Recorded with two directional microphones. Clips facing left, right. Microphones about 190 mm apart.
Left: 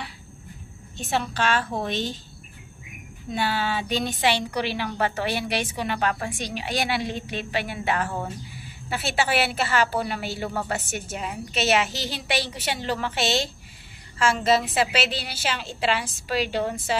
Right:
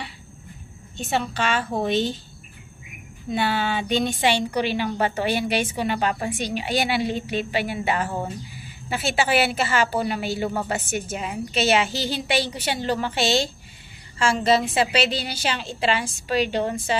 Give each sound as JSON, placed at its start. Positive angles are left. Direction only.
{"t": 0.9, "sound": "a woman's voice", "side_deg": 0}
{"t": 3.3, "sound": "a woman's voice", "side_deg": 0}